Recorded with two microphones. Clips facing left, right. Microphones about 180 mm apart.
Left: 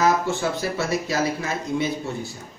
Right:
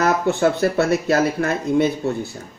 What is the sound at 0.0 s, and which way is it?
Speech, 60° right (ahead or behind).